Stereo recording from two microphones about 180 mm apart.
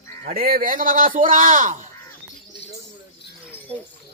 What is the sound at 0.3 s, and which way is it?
Speech, 55° right (ahead or behind).